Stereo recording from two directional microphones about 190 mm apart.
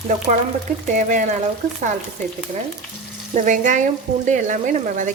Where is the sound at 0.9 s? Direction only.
40° right (ahead or behind).